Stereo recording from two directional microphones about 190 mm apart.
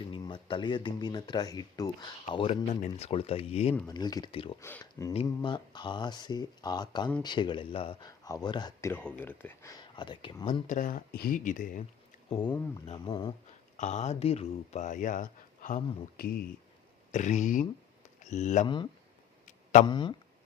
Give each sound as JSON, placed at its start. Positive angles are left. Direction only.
{"t": 0.1, "sound": "speech", "side_deg": 25}
{"t": 3.8, "sound": "speech", "side_deg": 20}
{"t": 4.6, "sound": "speech", "side_deg": 15}
{"t": 8.9, "sound": "speech", "side_deg": 10}
{"t": 10.7, "sound": "speech", "side_deg": 45}
{"t": 12.9, "sound": "speech", "side_deg": 25}
{"t": 13.7, "sound": "speech", "side_deg": 40}
{"t": 17.1, "sound": "speech", "side_deg": 40}
{"t": 18.6, "sound": "speech", "side_deg": 25}